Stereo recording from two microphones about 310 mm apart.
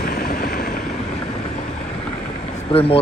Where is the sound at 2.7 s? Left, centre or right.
Centre.